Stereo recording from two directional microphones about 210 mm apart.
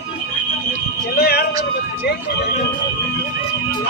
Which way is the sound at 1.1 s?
50° left (ahead or behind).